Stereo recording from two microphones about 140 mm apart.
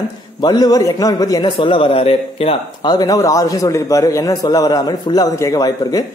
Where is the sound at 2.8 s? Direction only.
30° left (ahead or behind).